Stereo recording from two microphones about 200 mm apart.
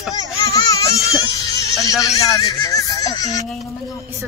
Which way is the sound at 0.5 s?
15° left (ahead or behind).